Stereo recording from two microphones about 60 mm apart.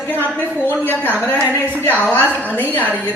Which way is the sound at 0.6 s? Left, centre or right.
Left.